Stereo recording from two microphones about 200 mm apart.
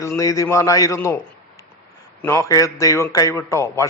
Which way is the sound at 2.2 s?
15° left (ahead or behind).